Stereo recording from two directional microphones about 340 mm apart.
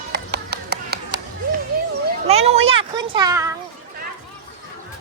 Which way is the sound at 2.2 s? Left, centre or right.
Centre.